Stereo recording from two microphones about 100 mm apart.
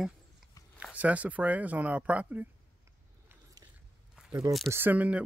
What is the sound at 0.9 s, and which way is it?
Speech, 15° right (ahead or behind).